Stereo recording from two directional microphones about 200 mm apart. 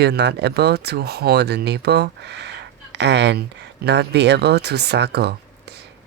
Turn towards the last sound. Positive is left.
turn(degrees=-55)  # may be behind; listen again after turning